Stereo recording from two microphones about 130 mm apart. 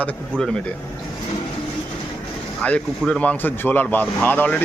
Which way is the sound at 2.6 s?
10° left (ahead or behind).